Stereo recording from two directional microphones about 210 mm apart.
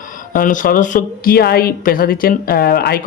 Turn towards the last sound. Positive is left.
turn(degrees=45)  # may be behind; listen again after turning